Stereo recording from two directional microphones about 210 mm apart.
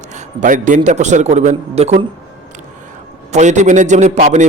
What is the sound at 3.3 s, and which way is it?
A man's voice, 35° right (ahead or behind).